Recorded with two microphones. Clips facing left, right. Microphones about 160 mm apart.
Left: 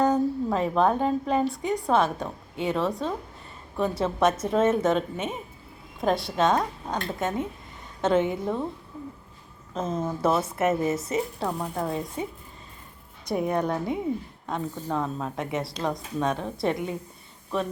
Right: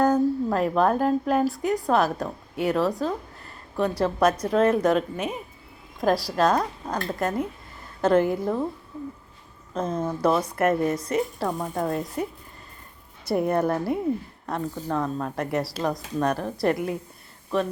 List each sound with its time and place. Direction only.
0.0 s a woman's voice: centre (ahead or behind)
9.7 s a woman's voice: centre (ahead or behind)
13.2 s a woman's voice: centre (ahead or behind)